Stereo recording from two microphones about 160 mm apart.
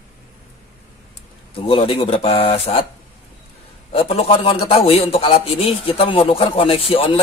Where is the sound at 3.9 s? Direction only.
40° left (ahead or behind).